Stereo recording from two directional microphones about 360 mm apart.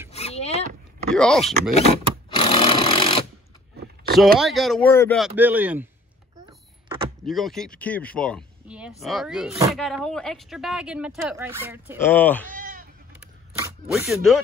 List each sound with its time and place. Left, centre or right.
0.1 s vehicle: centre
1.1 s a sound: centre
1.4 s a sound: centre
4.4 s speech: centre
7.2 s speech: centre
12.0 s speech: centre
12.5 s bleat: right
13.8 s speech: centre